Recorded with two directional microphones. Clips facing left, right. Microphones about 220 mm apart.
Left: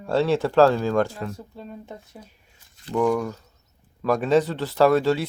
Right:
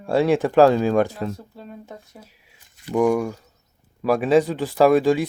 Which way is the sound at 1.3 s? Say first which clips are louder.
Even; centre (ahead or behind).